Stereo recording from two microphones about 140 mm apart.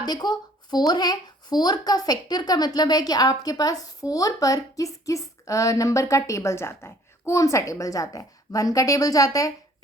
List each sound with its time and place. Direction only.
0.0 s speech: 30° left (ahead or behind)